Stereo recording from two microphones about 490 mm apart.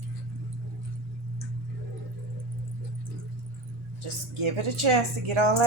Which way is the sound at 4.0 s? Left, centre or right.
Right.